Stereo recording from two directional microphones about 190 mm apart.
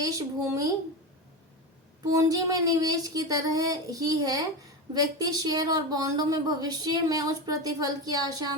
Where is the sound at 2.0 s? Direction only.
20° right (ahead or behind).